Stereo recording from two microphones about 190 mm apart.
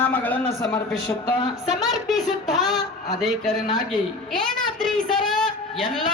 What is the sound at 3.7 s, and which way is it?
Speech, 20° left (ahead or behind).